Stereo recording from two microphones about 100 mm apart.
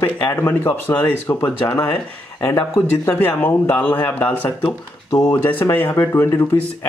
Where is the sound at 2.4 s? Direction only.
30° left (ahead or behind).